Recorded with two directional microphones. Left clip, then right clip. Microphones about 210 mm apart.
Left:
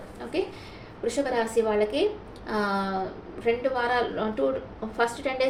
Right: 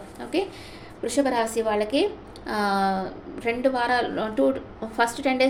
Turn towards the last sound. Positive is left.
turn(degrees=-55)  # may be behind; listen again after turning